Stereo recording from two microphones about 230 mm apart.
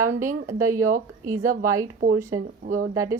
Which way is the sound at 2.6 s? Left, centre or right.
Right.